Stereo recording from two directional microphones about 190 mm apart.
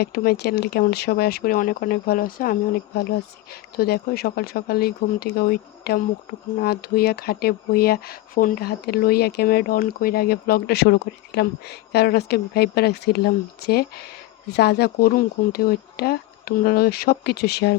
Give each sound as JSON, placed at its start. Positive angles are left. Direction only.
{"t": 0.0, "sound": "speech", "side_deg": 55}